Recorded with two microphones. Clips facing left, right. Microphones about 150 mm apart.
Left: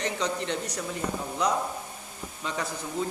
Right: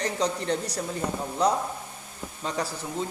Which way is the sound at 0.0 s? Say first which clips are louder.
Right 2 dB; 35° right (ahead or behind).